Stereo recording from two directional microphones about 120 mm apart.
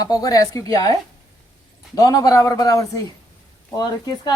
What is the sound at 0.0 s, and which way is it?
Speech, 30° left (ahead or behind).